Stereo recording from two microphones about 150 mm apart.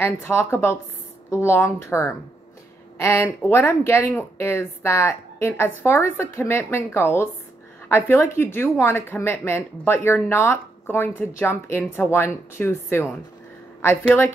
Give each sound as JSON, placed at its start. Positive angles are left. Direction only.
{"t": 0.0, "sound": "speech", "side_deg": 15}